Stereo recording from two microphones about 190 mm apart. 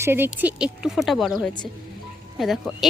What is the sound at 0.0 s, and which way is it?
Speech, 10° right (ahead or behind).